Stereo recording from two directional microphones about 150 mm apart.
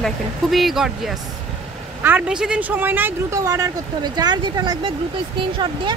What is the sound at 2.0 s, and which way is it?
Speech, 10° right (ahead or behind).